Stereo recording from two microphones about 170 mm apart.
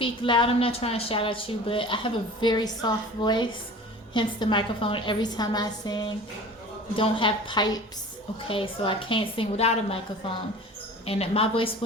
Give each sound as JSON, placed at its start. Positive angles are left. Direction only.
{"t": 0.0, "sound": "a woman's voice", "side_deg": 30}